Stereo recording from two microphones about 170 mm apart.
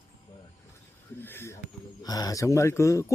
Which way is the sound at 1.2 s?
15° left (ahead or behind).